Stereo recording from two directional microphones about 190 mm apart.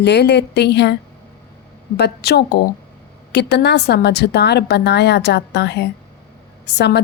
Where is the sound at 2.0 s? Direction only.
60° left (ahead or behind).